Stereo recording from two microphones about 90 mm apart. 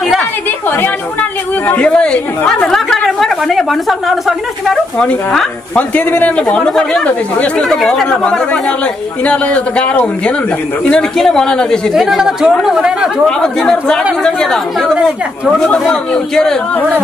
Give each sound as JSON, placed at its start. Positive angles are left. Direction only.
{"t": 0.7, "sound": "a sound", "side_deg": 20}
{"t": 1.7, "sound": "a woman's voice", "side_deg": 15}
{"t": 4.9, "sound": "speech", "side_deg": 5}
{"t": 5.8, "sound": "speech", "side_deg": 20}
{"t": 11.9, "sound": "speech", "side_deg": -5}
{"t": 13.4, "sound": "speech", "side_deg": 5}